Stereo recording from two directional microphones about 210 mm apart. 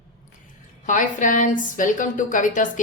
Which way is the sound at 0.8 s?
35° left (ahead or behind).